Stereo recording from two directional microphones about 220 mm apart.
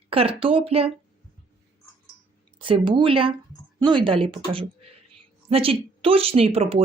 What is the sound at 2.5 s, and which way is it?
Speech, 25° right (ahead or behind).